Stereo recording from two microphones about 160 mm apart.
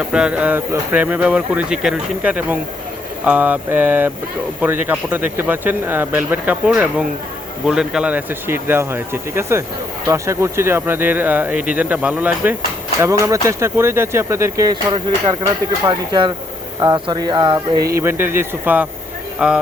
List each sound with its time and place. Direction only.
0.1 s speech: 5° right (ahead or behind); by 17.8 s 30° right (ahead or behind)
17.9 s speech: 15° right (ahead or behind)